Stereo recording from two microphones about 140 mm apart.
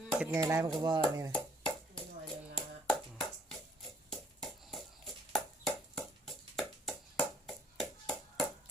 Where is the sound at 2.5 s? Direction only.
5° left (ahead or behind).